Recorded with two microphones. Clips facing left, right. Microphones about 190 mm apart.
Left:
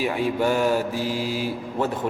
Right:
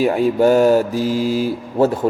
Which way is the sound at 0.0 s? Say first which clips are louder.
Right 8 dB; 45° right (ahead or behind).